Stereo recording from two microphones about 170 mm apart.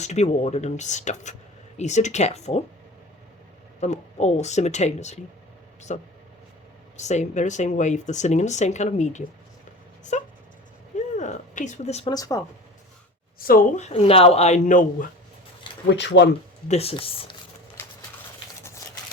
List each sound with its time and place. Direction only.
0.0 s speech: 40° left (ahead or behind)
3.8 s speech: 40° left (ahead or behind)
12.1 s speech: 20° left (ahead or behind)
13.4 s speech: 55° left (ahead or behind)
15.9 s speech: 90° left
16.6 s speech: 35° left (ahead or behind)